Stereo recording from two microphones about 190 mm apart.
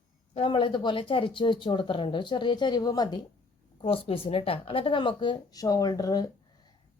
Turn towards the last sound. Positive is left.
turn(degrees=20)  # may be behind; listen again after turning